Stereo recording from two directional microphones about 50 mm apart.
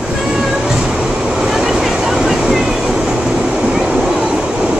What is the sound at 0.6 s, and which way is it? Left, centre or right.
Vehicle, centre.